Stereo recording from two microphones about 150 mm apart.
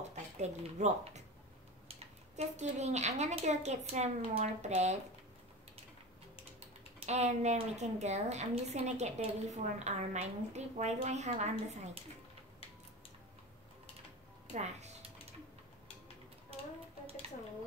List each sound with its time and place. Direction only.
0.1 s speech: 50° right (ahead or behind)
2.3 s a woman's voice: 50° right (ahead or behind)
7.1 s a woman's voice: 50° right (ahead or behind)
14.5 s speech: 50° right (ahead or behind)